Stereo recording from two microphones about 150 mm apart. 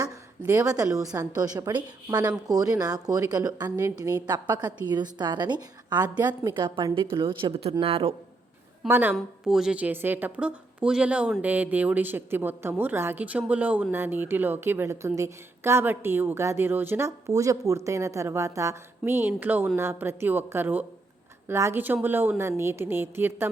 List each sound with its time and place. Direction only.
0.0 s a sound: 20° right (ahead or behind)
1.1 s a woman's voice: 25° right (ahead or behind)
8.9 s a woman's voice: 10° right (ahead or behind)